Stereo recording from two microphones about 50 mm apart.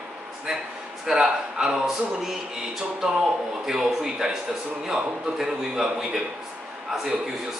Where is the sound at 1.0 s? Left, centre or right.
Centre.